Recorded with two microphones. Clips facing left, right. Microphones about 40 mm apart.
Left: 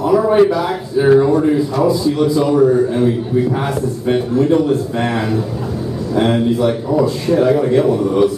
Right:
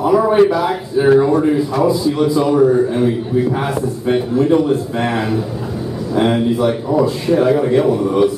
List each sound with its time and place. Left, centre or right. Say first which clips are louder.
0.0 s a man's voice: even; centre